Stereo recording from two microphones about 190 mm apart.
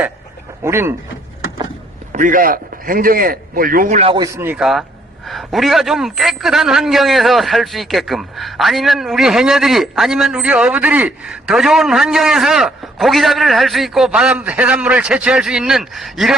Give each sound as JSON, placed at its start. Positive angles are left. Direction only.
{"t": 0.6, "sound": "speech", "side_deg": -15}
{"t": 2.1, "sound": "a man's voice", "side_deg": -45}
{"t": 4.1, "sound": "a man's voice", "side_deg": -15}